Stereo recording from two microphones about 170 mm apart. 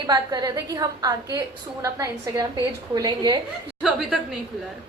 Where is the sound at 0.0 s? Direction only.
25° right (ahead or behind).